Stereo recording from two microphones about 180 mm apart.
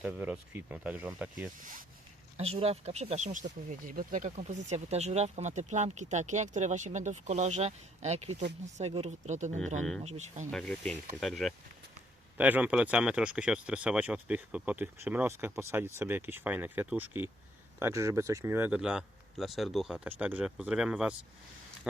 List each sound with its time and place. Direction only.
0.0 s speech: 10° right (ahead or behind)
1.5 s speech: 50° right (ahead or behind)
2.4 s speech: 35° right (ahead or behind)
10.5 s speech: 5° left (ahead or behind)